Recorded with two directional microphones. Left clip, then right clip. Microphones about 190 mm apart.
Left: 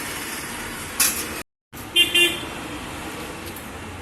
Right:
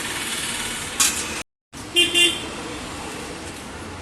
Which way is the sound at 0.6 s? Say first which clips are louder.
Right 1 dB; centre (ahead or behind).